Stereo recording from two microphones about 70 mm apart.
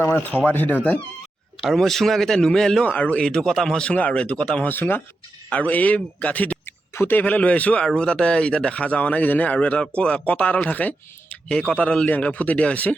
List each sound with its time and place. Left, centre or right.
0.0 s speech: left
1.7 s a man's voice: centre
2.8 s speech: left
3.2 s speech: centre
4.7 s speech: left